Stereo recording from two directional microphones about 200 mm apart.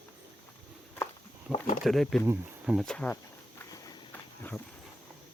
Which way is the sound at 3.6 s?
20° left (ahead or behind).